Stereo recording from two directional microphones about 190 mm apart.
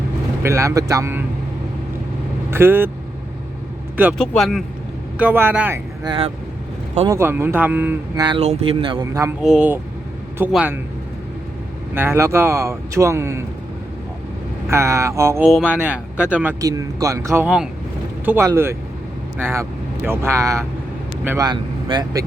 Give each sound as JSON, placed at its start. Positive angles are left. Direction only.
{"t": 0.4, "sound": "speech", "side_deg": -15}
{"t": 2.5, "sound": "speech", "side_deg": -10}
{"t": 4.2, "sound": "speech", "side_deg": 0}
{"t": 5.1, "sound": "speech", "side_deg": -10}
{"t": 6.1, "sound": "speech", "side_deg": -30}
{"t": 7.1, "sound": "speech", "side_deg": -15}
{"t": 8.2, "sound": "speech", "side_deg": -25}
{"t": 9.4, "sound": "speech", "side_deg": -5}
{"t": 11.9, "sound": "speech", "side_deg": -15}
{"t": 14.7, "sound": "speech", "side_deg": -15}
{"t": 15.4, "sound": "speech", "side_deg": -5}